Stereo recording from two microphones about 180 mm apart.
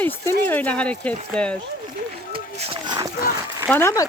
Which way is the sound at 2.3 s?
30° right (ahead or behind).